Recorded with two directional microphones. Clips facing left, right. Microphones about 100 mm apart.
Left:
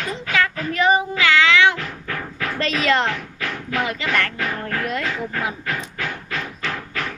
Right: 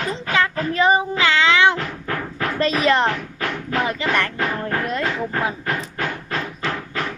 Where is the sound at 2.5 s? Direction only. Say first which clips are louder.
Right 2 dB; 25° right (ahead or behind).